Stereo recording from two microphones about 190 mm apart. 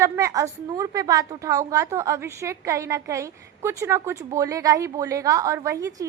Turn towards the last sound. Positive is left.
turn(degrees=-15)  # may be behind; listen again after turning